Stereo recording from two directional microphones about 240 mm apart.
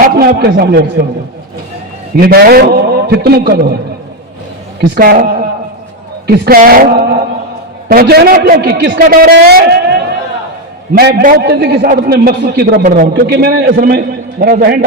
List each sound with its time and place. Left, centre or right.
0.0 s a man's voice: right
2.1 s a man's voice: right
4.9 s a man's voice: right
10.9 s a man's voice: right